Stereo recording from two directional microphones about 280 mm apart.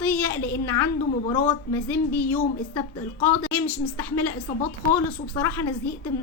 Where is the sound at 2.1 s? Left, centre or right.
Centre.